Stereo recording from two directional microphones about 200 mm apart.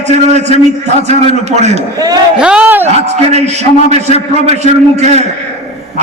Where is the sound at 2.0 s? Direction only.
20° right (ahead or behind).